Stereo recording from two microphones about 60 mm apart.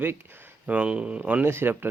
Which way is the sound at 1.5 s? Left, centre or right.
Right.